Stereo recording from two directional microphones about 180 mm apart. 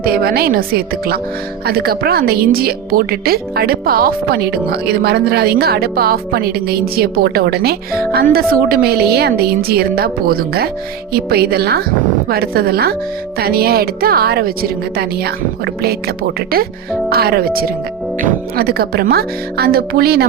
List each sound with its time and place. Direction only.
0.0 s a woman's voice: 55° right (ahead or behind)